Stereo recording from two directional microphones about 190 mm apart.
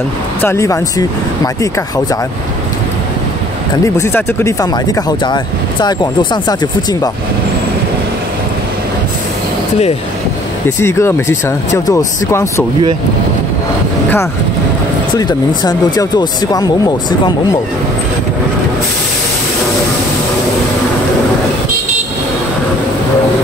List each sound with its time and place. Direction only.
0.4 s speech: 15° left (ahead or behind)
3.8 s speech: 15° left (ahead or behind)
10.8 s speech: 15° left (ahead or behind)
15.1 s speech: 20° left (ahead or behind)